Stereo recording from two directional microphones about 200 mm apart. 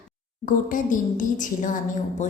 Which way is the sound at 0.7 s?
40° left (ahead or behind).